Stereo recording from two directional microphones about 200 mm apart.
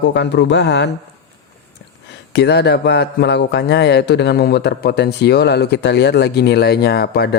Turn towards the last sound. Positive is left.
turn(degrees=55)  # may be behind; listen again after turning